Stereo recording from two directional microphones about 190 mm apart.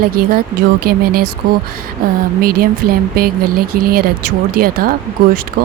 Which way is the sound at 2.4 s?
50° right (ahead or behind).